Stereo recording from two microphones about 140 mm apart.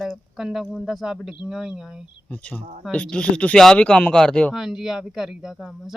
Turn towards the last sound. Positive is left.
turn(degrees=0)  # may be behind; listen again after turning